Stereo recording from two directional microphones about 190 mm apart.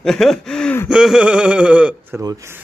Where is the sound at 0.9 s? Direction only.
5° right (ahead or behind).